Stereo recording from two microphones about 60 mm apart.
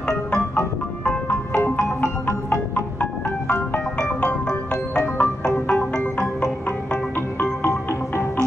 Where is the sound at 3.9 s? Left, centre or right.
Centre.